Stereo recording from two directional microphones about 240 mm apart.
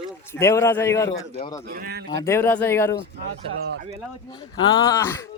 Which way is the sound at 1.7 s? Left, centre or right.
Right.